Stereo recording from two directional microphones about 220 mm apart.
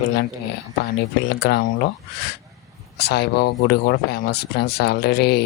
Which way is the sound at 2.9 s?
50° left (ahead or behind).